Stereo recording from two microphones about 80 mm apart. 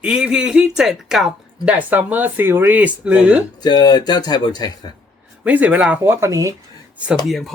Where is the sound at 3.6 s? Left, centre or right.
Left.